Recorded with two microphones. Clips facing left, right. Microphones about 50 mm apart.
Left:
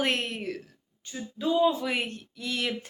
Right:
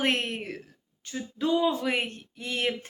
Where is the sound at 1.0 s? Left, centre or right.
Right.